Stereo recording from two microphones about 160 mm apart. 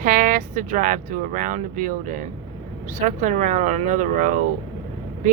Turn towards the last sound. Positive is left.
turn(degrees=-50)  # may be behind; listen again after turning